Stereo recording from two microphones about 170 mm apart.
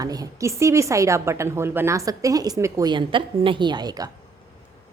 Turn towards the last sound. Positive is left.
turn(degrees=-25)  # may be behind; listen again after turning